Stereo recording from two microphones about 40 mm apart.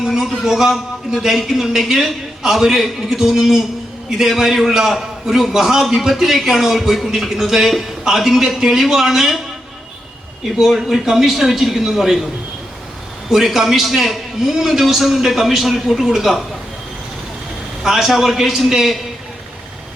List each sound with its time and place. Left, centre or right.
0.0 s a man's voice: centre
10.6 s a man's voice: centre
13.3 s a man's voice: centre
17.8 s a man's voice: centre